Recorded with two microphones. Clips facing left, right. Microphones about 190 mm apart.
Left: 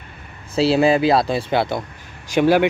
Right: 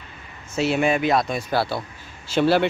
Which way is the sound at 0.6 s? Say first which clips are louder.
Left 5 dB; 35° left (ahead or behind).